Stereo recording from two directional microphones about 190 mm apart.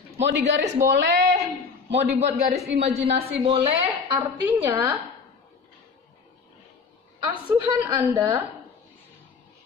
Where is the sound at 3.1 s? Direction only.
35° right (ahead or behind).